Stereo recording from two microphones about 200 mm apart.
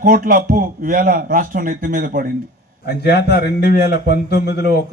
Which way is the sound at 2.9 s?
55° left (ahead or behind).